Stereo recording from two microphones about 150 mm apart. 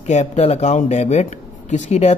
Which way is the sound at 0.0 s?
50° left (ahead or behind).